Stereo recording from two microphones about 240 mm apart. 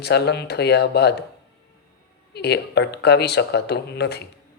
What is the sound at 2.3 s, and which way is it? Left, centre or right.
Speech, left.